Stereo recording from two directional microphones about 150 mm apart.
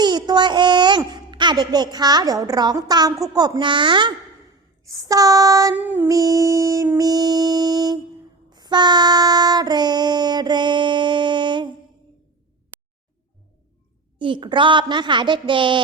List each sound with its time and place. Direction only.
0.0 s a sound: 30° right (ahead or behind)
3.3 s a woman's voice: 25° right (ahead or behind)
4.9 s music: 25° right (ahead or behind)
5.7 s a sound: 10° right (ahead or behind)
6.1 s music: 25° right (ahead or behind)
8.4 s child singing: 30° right (ahead or behind)
14.2 s a woman's voice: 30° right (ahead or behind)